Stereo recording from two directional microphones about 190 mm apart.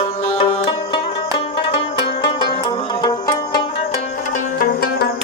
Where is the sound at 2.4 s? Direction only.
20° left (ahead or behind).